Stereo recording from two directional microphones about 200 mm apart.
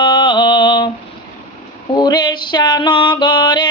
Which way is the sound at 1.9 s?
20° left (ahead or behind).